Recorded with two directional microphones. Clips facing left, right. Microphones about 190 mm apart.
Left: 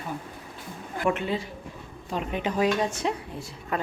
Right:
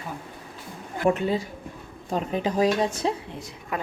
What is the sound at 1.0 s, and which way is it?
Speech, 40° right (ahead or behind).